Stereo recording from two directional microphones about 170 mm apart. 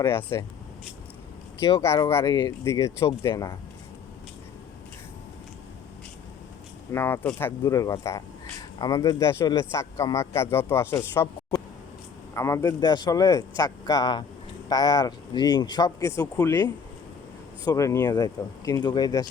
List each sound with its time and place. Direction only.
0.0 s a man's voice: 15° left (ahead or behind)
1.8 s a man's voice: 15° left (ahead or behind)
6.9 s a man's voice: 15° left (ahead or behind)